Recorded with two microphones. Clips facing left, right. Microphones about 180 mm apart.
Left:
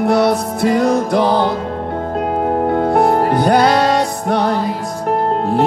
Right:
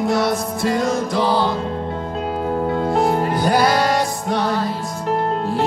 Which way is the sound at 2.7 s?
55° left (ahead or behind).